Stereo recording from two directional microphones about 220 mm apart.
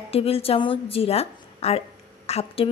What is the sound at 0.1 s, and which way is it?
A woman's voice, 25° left (ahead or behind).